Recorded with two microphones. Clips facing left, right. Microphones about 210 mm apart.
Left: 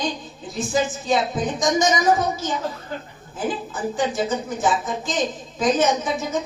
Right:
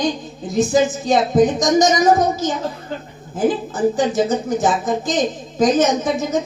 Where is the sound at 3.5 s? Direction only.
40° right (ahead or behind).